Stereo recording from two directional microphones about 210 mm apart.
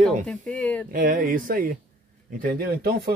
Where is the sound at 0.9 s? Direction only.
40° right (ahead or behind).